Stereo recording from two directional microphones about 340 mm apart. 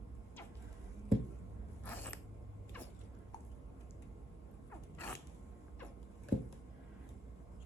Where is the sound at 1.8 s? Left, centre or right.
Centre.